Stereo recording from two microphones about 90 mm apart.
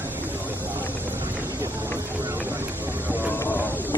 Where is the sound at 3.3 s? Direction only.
20° left (ahead or behind).